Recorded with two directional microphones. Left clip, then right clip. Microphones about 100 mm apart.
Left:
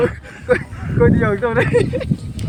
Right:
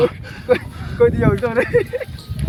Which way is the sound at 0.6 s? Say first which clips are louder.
Right 1 dB; 15° right (ahead or behind).